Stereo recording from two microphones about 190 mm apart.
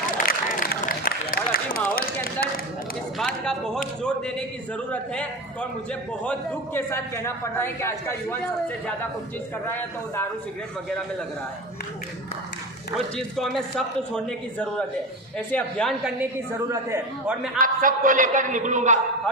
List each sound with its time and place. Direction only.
0.2 s a sound: 45° left (ahead or behind)
3.2 s a man's voice: centre (ahead or behind)
13.1 s a man's voice: centre (ahead or behind)
16.6 s a man's voice: 15° right (ahead or behind)
17.6 s a man's voice: 45° right (ahead or behind)